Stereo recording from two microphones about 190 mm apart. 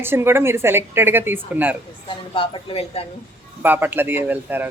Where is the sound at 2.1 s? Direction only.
25° left (ahead or behind).